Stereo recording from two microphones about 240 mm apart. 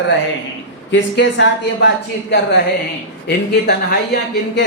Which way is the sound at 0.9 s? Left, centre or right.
Left.